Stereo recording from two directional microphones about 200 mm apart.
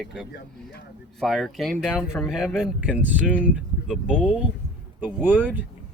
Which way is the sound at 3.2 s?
5° left (ahead or behind).